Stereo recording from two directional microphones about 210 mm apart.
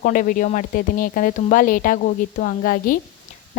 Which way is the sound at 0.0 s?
40° left (ahead or behind).